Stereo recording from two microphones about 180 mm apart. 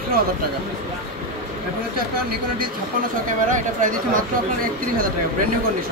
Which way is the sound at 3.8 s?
50° right (ahead or behind).